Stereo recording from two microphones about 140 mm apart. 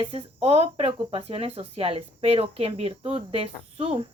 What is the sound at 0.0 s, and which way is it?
Speech, 40° right (ahead or behind).